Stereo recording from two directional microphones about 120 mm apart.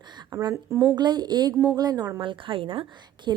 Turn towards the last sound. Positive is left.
turn(degrees=-35)  # may be behind; listen again after turning